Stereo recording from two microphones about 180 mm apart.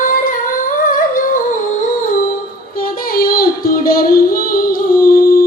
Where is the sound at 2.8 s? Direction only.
55° left (ahead or behind).